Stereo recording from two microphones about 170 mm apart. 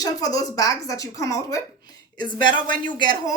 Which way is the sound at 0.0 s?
20° left (ahead or behind).